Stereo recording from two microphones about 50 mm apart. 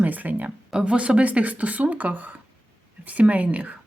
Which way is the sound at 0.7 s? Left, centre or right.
Centre.